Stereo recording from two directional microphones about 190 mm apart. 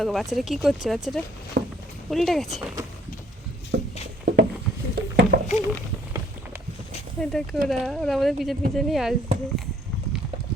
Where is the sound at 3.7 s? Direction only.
60° right (ahead or behind).